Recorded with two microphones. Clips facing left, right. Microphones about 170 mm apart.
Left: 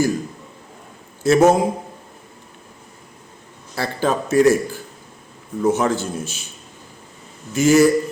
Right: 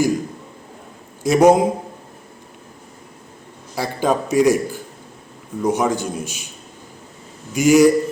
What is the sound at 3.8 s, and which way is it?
A man's voice, 15° right (ahead or behind).